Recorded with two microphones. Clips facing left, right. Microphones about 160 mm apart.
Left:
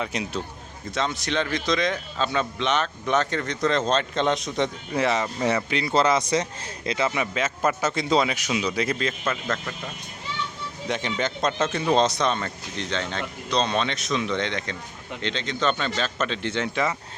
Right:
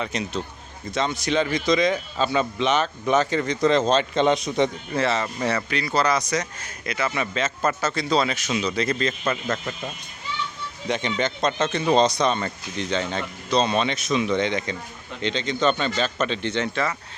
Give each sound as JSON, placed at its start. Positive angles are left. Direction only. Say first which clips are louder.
{"t": 0.0, "sound": "a man's voice", "louder": "right 1 dB", "side_deg": 5}
{"t": 4.9, "sound": "a man's voice", "louder": "even", "side_deg": 15}
{"t": 10.8, "sound": "speech", "louder": "right 2 dB", "side_deg": 0}